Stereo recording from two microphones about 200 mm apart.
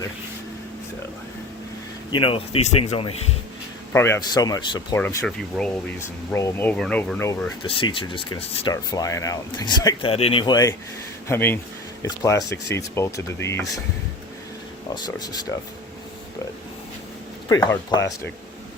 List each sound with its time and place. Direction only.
2.1 s speech: 25° left (ahead or behind)
3.9 s speech: 10° left (ahead or behind)
4.9 s speech: 5° left (ahead or behind)
7.6 s speech: 25° left (ahead or behind)
14.9 s speech: 20° left (ahead or behind)
17.5 s speech: 20° left (ahead or behind)